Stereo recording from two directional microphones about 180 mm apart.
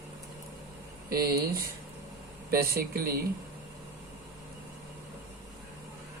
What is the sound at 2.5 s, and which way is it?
Speech, 55° right (ahead or behind).